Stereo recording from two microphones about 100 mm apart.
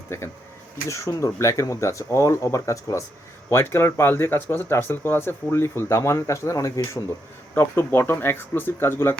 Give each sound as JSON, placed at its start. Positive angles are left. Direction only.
{"t": 0.1, "sound": "speech", "side_deg": 25}